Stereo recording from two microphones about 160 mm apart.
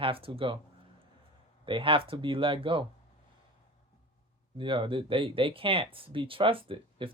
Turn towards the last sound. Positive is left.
turn(degrees=-35)  # may be behind; listen again after turning